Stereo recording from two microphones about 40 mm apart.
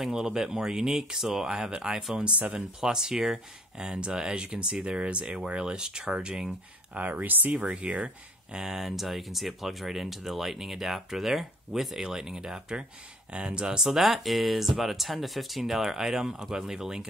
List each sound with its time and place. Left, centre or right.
0.1 s speech: centre
6.9 s speech: right
7.6 s speech: right
8.5 s speech: centre
13.3 s speech: right
13.8 s speech: centre